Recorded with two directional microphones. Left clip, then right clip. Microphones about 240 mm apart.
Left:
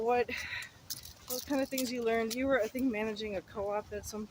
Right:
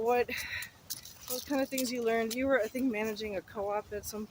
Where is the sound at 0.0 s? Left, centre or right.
Centre.